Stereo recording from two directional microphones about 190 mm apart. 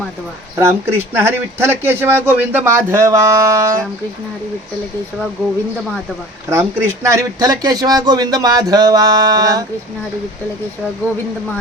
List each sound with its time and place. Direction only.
0.6 s speech: 15° right (ahead or behind)
6.5 s speech: 15° right (ahead or behind)